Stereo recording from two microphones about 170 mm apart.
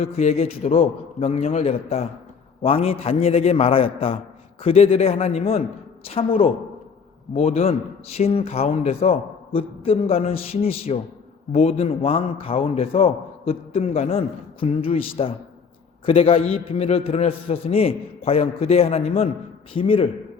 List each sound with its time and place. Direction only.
0.0 s a man's voice: 40° left (ahead or behind)